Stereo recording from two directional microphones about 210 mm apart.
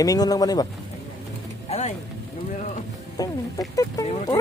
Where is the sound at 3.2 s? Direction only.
15° left (ahead or behind).